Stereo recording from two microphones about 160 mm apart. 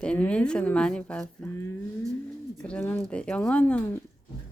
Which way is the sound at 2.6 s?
10° left (ahead or behind).